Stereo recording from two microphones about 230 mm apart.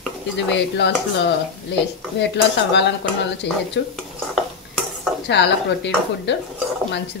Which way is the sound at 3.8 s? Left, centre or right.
Left.